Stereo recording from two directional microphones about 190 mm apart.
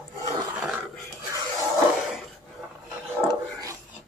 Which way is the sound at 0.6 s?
5° right (ahead or behind).